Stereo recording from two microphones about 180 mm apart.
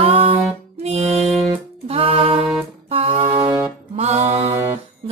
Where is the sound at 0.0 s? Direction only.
30° right (ahead or behind).